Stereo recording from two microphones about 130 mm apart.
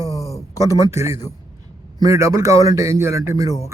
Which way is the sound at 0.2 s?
25° left (ahead or behind).